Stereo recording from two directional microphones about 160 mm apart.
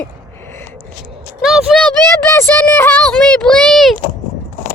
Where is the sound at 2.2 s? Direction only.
15° left (ahead or behind).